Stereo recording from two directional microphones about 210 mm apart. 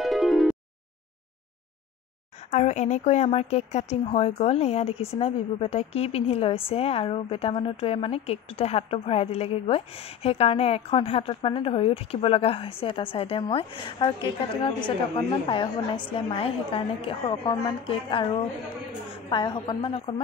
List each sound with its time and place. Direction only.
0.0 s music: centre (ahead or behind)
2.5 s a woman's voice: 35° left (ahead or behind)